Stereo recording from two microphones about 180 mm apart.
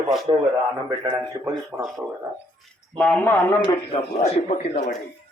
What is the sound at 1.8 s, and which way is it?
Speech, 5° right (ahead or behind).